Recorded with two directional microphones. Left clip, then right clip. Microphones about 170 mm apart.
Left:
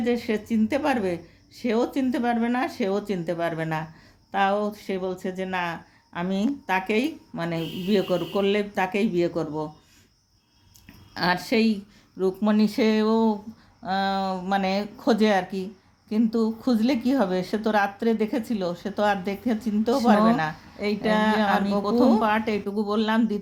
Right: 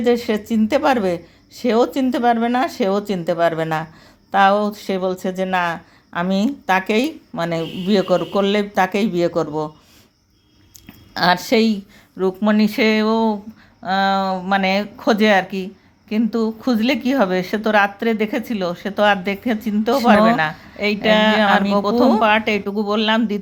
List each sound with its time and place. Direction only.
0.0 s speech: 20° right (ahead or behind)
11.1 s speech: 20° right (ahead or behind)